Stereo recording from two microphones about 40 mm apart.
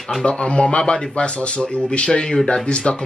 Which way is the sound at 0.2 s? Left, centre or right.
Left.